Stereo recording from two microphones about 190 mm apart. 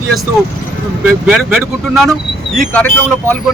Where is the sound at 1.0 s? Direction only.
5° right (ahead or behind).